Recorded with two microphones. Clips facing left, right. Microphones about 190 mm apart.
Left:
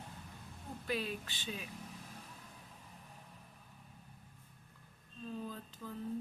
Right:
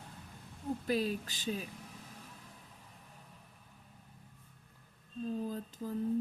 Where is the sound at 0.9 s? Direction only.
40° right (ahead or behind).